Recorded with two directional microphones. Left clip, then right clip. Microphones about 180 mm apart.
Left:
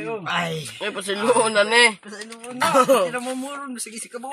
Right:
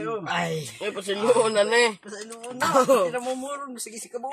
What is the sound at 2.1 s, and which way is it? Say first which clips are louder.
Speech: left 1 dB; 10° right (ahead or behind).